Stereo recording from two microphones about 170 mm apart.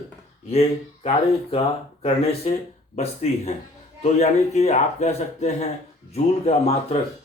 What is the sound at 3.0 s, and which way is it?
Speech, 40° left (ahead or behind).